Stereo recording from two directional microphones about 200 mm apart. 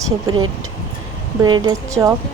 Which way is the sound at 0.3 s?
20° right (ahead or behind).